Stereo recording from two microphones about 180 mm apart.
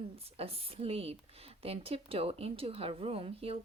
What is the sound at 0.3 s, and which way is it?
Speech, 35° right (ahead or behind).